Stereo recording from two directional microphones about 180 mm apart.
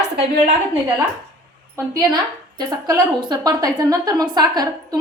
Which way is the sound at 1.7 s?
20° right (ahead or behind).